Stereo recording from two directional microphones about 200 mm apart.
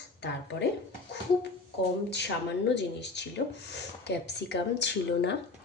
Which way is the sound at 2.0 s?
60° left (ahead or behind).